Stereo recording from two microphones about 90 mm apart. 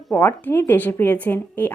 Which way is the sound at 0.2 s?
20° left (ahead or behind).